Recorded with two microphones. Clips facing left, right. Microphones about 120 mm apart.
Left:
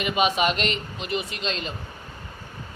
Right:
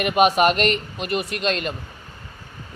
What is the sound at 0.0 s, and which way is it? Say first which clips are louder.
Speech: right 6 dB; 55° right (ahead or behind).